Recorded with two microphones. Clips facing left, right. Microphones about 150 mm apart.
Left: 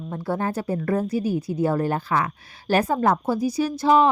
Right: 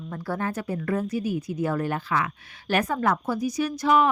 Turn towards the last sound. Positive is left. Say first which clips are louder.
# left 3 dB
turn(degrees=30)  # may be behind; listen again after turning